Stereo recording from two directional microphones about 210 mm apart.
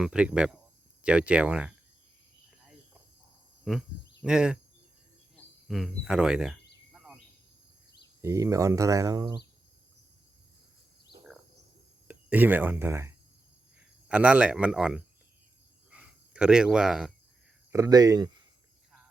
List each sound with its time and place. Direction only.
0.0 s speech: 5° right (ahead or behind)
3.6 s speech: centre (ahead or behind)
5.6 s speech: centre (ahead or behind)
6.9 s a sound: centre (ahead or behind)
8.2 s speech: 15° right (ahead or behind)
12.0 s speech: 10° right (ahead or behind)
15.9 s cricket: 5° right (ahead or behind)
17.7 s speech: 15° right (ahead or behind)